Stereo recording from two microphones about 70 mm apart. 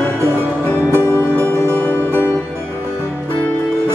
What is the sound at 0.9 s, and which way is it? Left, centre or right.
Music, right.